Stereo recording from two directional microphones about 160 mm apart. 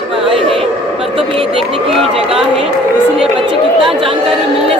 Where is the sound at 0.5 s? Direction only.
Centre (ahead or behind).